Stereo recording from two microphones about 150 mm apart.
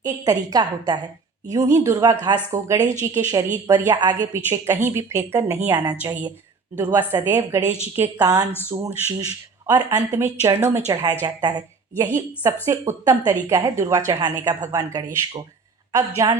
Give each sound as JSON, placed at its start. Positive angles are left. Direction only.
{"t": 0.0, "sound": "a woman's voice", "side_deg": -25}
{"t": 6.7, "sound": "speech", "side_deg": -15}
{"t": 8.2, "sound": "a woman's voice", "side_deg": -25}